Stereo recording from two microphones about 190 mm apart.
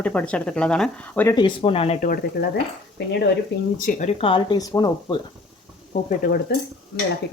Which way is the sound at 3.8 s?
40° left (ahead or behind).